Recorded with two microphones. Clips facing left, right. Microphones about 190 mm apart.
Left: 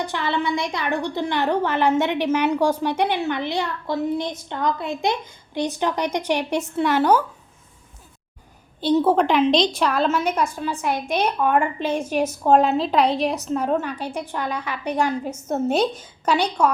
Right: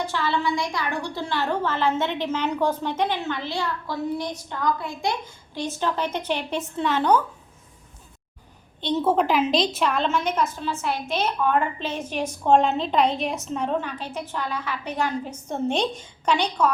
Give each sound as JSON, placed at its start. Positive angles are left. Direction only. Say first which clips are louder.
{"t": 0.1, "sound": "a woman's voice", "louder": "left 1 dB", "side_deg": 20}
{"t": 9.0, "sound": "a woman's voice", "louder": "left 2 dB", "side_deg": 0}
{"t": 13.7, "sound": "a woman's voice", "louder": "left 3 dB", "side_deg": 10}